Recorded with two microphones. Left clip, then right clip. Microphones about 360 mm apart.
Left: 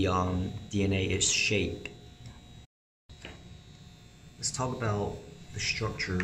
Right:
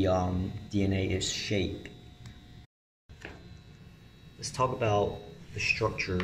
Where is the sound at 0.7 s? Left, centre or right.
Centre.